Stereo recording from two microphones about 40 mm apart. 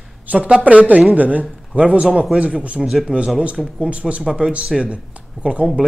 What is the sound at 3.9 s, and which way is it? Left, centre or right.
Speech, right.